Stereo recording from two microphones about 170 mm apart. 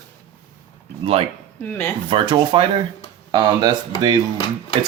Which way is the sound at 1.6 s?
10° left (ahead or behind).